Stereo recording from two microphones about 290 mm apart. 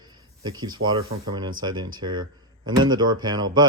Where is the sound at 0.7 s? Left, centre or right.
Right.